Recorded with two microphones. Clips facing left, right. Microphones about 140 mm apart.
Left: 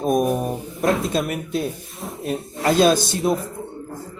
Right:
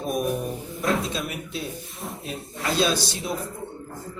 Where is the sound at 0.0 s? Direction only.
45° left (ahead or behind).